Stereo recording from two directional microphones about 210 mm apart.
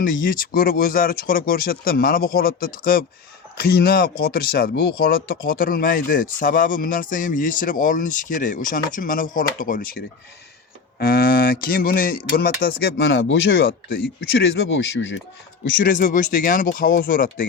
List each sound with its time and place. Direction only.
0.0 s speech: 40° left (ahead or behind)
11.0 s speech: 45° left (ahead or behind)
12.8 s speech: 60° left (ahead or behind)
13.9 s speech: 50° left (ahead or behind)
15.8 s speech: 40° left (ahead or behind)